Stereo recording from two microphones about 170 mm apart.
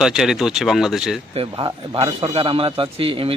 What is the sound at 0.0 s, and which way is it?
Speech, 5° right (ahead or behind).